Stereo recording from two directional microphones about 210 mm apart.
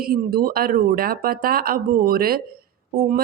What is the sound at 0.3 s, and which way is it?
Speech, 45° right (ahead or behind).